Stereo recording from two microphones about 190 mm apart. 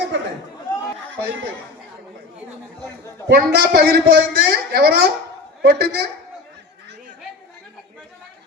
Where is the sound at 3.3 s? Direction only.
55° right (ahead or behind).